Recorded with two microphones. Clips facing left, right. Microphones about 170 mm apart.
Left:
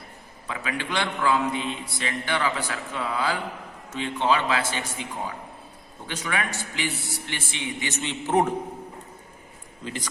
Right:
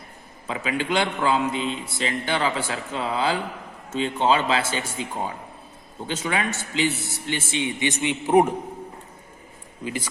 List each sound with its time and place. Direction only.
0.4 s a man's voice: 25° right (ahead or behind)
9.8 s speech: 10° right (ahead or behind)